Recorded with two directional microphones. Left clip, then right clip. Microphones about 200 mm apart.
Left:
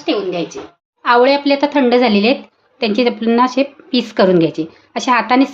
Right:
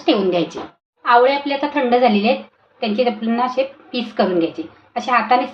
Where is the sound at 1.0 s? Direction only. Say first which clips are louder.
Left 2 dB; 50° left (ahead or behind).